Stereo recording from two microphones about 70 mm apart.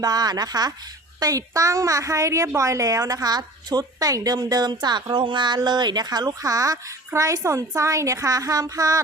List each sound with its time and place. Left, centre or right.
0.0 s speech: right
1.2 s a woman's voice: right